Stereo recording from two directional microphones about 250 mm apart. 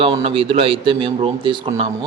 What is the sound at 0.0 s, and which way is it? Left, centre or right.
A man's voice, right.